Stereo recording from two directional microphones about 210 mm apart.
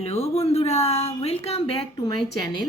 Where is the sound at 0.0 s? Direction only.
30° left (ahead or behind).